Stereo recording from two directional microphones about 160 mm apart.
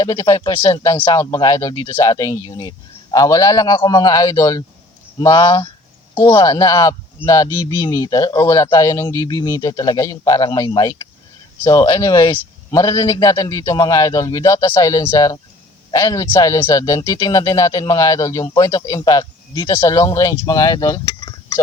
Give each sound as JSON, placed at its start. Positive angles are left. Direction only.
{"t": 0.0, "sound": "speech", "side_deg": 20}